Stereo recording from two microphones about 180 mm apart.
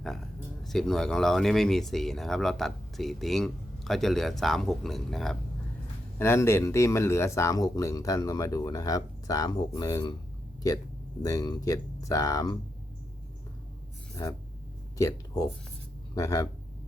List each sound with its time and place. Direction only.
0.6 s speech: centre (ahead or behind)
6.1 s speech: 15° left (ahead or behind)
11.2 s speech: 20° left (ahead or behind)
14.2 s speech: 15° left (ahead or behind)